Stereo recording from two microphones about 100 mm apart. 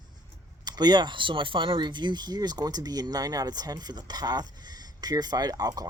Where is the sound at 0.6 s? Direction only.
45° right (ahead or behind).